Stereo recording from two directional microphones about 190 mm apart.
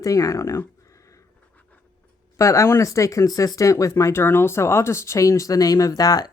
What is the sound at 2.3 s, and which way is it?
Speech, 15° left (ahead or behind).